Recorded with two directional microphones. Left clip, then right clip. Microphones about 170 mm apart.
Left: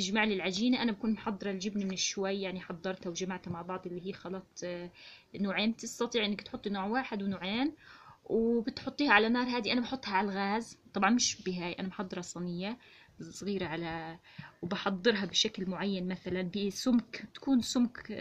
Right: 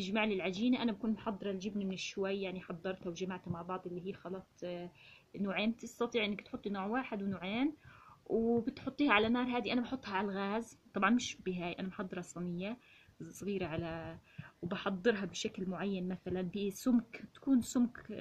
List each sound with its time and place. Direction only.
0.1 s a woman's voice: 30° left (ahead or behind)